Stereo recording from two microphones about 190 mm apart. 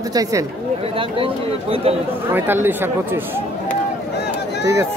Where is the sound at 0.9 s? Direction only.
30° right (ahead or behind).